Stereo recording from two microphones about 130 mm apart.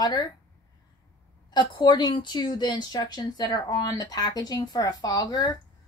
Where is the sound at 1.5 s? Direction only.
35° left (ahead or behind).